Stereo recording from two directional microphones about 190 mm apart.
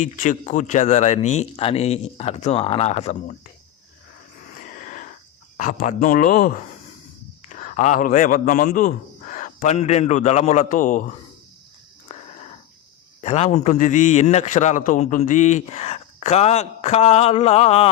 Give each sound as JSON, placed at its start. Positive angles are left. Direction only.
{"t": 0.0, "sound": "a man's voice", "side_deg": 40}
{"t": 4.8, "sound": "wheeze", "side_deg": 40}
{"t": 5.5, "sound": "a man's voice", "side_deg": 45}
{"t": 12.0, "sound": "a sound", "side_deg": 35}
{"t": 13.2, "sound": "a man's voice", "side_deg": 35}